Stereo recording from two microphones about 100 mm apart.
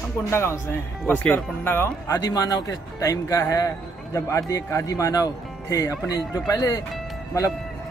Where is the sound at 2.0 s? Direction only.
35° left (ahead or behind).